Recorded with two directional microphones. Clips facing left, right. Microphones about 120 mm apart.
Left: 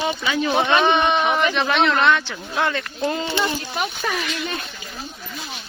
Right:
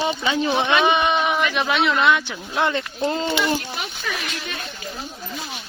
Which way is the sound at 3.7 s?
50° left (ahead or behind).